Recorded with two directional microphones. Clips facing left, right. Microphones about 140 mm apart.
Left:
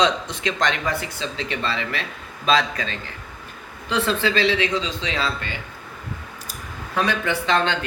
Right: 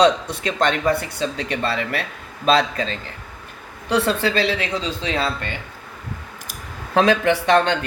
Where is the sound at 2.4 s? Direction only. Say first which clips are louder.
Right 3 dB; 35° right (ahead or behind).